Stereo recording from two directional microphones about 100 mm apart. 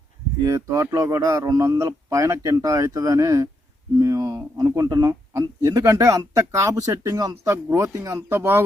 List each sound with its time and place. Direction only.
0.4 s speech: 30° right (ahead or behind)